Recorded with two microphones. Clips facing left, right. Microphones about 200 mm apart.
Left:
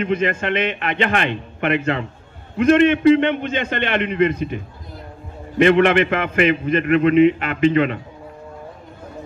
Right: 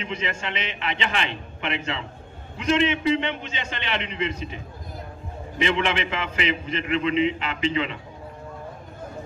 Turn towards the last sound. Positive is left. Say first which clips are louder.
# left 9 dB
turn(degrees=55)  # may be behind; listen again after turning